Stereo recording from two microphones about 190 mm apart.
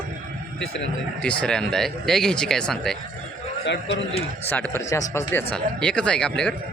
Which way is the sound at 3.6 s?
70° left (ahead or behind).